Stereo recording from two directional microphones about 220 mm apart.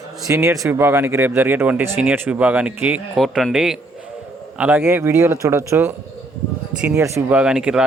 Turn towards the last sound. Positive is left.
turn(degrees=-5)  # may be behind; listen again after turning